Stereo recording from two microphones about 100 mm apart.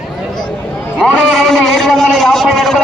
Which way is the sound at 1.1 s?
5° left (ahead or behind).